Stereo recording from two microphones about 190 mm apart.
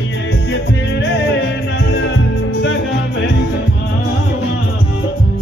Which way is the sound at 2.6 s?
75° left (ahead or behind).